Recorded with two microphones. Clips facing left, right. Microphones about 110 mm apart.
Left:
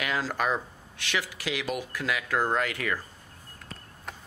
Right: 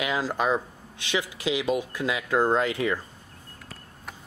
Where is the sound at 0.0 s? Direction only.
20° right (ahead or behind).